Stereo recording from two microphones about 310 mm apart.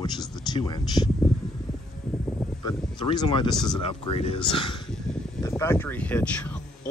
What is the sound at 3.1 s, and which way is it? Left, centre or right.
Speech, centre.